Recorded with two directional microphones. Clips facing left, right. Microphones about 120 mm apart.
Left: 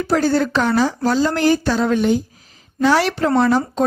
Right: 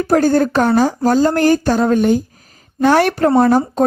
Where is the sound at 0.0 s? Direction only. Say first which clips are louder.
Right 4 dB; 50° right (ahead or behind).